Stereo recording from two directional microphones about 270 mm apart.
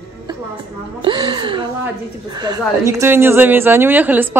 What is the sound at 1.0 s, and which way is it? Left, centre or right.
Speech, centre.